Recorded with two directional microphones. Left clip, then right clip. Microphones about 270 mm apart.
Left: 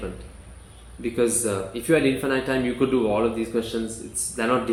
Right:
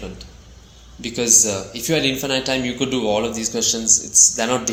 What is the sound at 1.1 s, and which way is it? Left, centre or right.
Speech, right.